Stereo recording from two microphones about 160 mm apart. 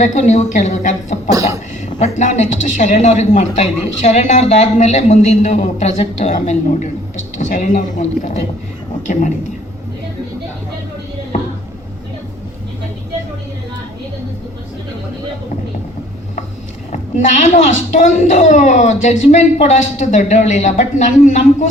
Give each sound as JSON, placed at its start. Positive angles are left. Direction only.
{"t": 0.0, "sound": "a woman's voice", "side_deg": 50}
{"t": 1.3, "sound": "speech", "side_deg": -20}
{"t": 2.1, "sound": "a woman's voice", "side_deg": 50}
{"t": 11.3, "sound": "a sound", "side_deg": 55}
{"t": 16.9, "sound": "a woman's voice", "side_deg": 50}